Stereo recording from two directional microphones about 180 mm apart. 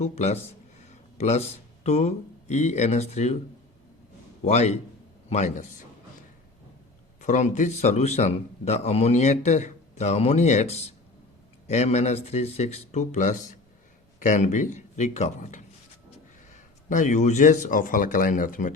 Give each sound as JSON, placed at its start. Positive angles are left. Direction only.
{"t": 0.0, "sound": "a man's voice", "side_deg": 35}
{"t": 4.4, "sound": "a man's voice", "side_deg": 40}
{"t": 7.2, "sound": "a man's voice", "side_deg": 40}